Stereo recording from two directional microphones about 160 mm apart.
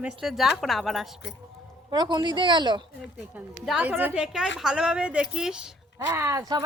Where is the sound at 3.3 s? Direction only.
5° right (ahead or behind).